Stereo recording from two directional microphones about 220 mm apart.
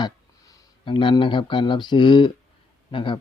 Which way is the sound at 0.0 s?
15° left (ahead or behind).